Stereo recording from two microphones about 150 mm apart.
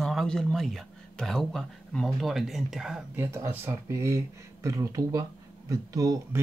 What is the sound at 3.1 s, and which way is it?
Speech, 15° right (ahead or behind).